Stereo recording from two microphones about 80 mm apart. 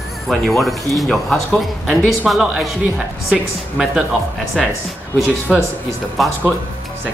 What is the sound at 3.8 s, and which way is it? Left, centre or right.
Speech, centre.